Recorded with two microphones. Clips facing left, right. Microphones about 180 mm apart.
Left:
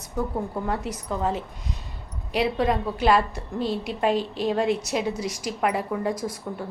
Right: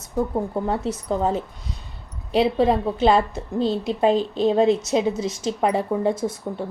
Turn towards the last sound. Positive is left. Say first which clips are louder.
# right 4 dB
turn(degrees=-25)  # may be behind; listen again after turning